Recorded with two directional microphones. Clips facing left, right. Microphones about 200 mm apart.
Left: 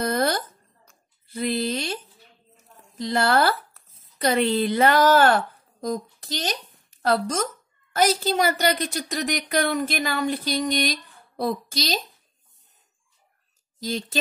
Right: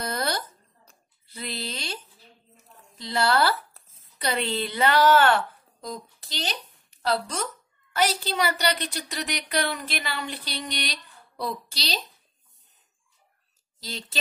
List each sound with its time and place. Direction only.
0.0 s a sound: 50° left (ahead or behind)
1.2 s speech: 50° left (ahead or behind)
3.0 s a woman's voice: 50° left (ahead or behind)
3.8 s a sound: 30° right (ahead or behind)
4.2 s a woman's voice: 50° left (ahead or behind)
13.8 s a woman's voice: 50° left (ahead or behind)